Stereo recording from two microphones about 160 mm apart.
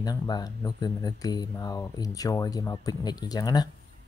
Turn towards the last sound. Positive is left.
turn(degrees=25)  # may be behind; listen again after turning